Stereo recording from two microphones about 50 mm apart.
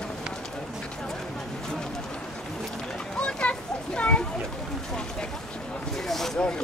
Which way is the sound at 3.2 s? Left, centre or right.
Left.